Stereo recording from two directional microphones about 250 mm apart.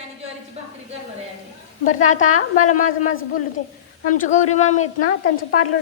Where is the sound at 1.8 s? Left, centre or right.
Left.